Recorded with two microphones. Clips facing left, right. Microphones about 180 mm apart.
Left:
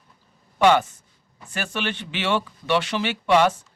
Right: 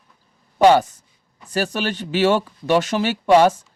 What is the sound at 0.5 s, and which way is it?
A man's voice, 40° right (ahead or behind).